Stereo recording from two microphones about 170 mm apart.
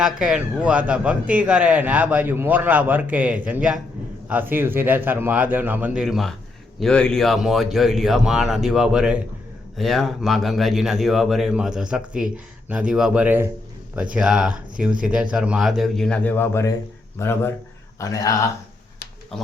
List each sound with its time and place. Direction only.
0.0 s a man's voice: 5° right (ahead or behind); by 18.3 s 20° left (ahead or behind)